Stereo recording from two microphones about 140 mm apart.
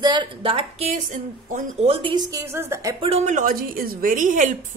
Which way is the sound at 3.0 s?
50° right (ahead or behind).